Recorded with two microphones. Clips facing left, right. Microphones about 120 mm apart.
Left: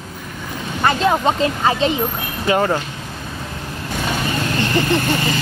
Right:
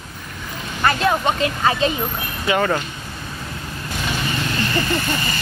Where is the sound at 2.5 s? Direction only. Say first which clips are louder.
Left 2 dB; 40° left (ahead or behind).